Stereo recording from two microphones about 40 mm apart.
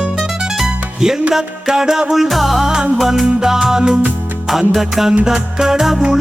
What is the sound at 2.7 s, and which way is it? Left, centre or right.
Music, centre.